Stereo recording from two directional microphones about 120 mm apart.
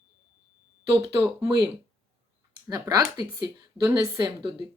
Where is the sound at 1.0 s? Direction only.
30° right (ahead or behind).